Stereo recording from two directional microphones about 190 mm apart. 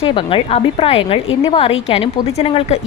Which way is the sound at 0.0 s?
30° left (ahead or behind).